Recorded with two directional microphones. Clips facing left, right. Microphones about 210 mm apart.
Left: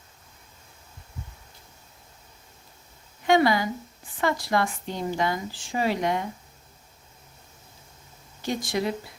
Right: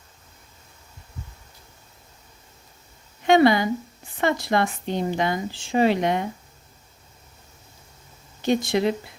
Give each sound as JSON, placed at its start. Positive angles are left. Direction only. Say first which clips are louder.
{"t": 3.2, "sound": "speech", "louder": "right 4 dB", "side_deg": -25}
{"t": 8.4, "sound": "speech", "louder": "right 6 dB", "side_deg": -25}